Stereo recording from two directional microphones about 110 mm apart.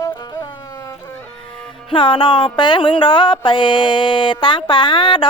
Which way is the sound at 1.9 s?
50° left (ahead or behind).